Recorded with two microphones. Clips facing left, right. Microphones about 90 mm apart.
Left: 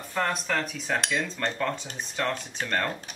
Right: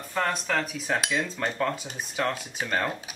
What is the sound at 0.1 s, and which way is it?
Cutlery, centre (ahead or behind).